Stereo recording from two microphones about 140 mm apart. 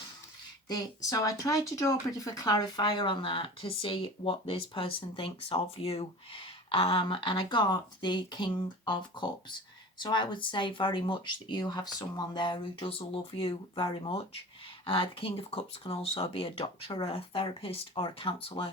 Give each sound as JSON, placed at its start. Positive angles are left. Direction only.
{"t": 0.7, "sound": "speech", "side_deg": 25}